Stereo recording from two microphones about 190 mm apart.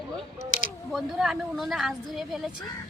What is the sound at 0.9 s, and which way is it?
A woman's voice, centre (ahead or behind).